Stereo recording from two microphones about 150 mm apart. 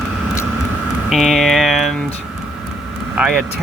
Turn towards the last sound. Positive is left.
turn(degrees=-5)  # may be behind; listen again after turning